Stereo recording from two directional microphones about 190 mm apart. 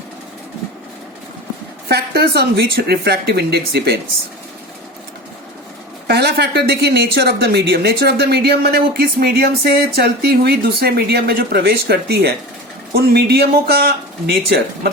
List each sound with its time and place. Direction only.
1.9 s speech: 55° right (ahead or behind)
6.1 s speech: 55° right (ahead or behind)